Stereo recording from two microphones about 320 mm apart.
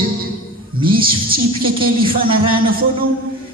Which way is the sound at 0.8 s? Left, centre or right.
Centre.